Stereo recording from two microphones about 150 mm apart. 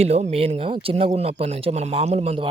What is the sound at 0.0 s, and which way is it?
Speech, 45° right (ahead or behind).